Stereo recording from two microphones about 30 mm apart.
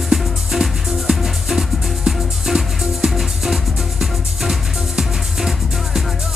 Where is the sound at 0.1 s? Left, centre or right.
Centre.